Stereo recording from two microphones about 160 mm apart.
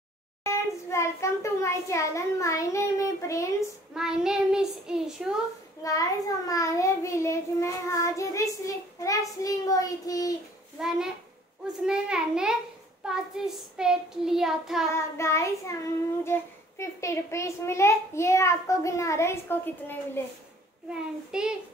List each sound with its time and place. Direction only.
0.4 s a child's voice: 15° left (ahead or behind)
3.9 s child singing: 5° right (ahead or behind)
5.8 s child singing: 20° left (ahead or behind)
10.8 s child singing: 5° right (ahead or behind)
15.0 s a child's voice: 15° left (ahead or behind)
20.9 s child singing: 5° right (ahead or behind)